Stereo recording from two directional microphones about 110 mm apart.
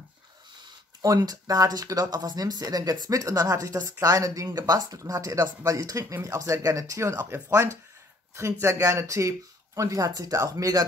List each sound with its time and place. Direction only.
1.0 s speech: 35° right (ahead or behind)